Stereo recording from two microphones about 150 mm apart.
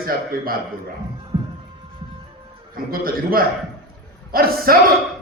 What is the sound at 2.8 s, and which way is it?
A man's voice, 80° right.